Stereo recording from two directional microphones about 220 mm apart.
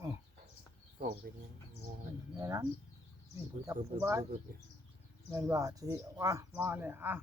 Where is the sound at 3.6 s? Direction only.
15° right (ahead or behind).